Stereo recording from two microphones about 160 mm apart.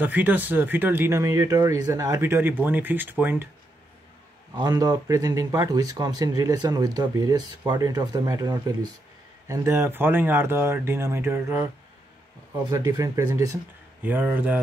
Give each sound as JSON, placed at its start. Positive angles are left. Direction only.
{"t": 0.0, "sound": "speech", "side_deg": -10}
{"t": 4.6, "sound": "speech", "side_deg": -25}